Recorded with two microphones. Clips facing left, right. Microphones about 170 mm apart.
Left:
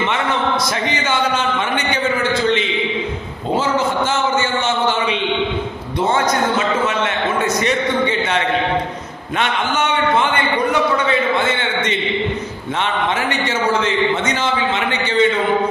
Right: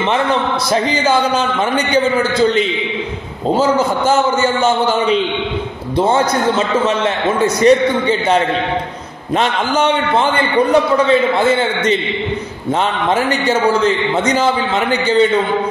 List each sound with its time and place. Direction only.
4.4 s a man's voice: 40° right (ahead or behind)
7.4 s a man's voice: 35° right (ahead or behind)
13.1 s a man's voice: 35° right (ahead or behind)